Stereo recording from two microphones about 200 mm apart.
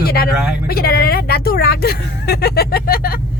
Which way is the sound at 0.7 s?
50° left (ahead or behind).